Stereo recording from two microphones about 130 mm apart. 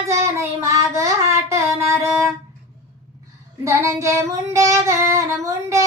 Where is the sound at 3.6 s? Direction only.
20° right (ahead or behind).